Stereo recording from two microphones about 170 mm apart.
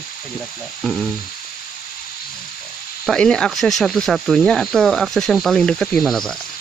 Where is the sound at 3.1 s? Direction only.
5° left (ahead or behind).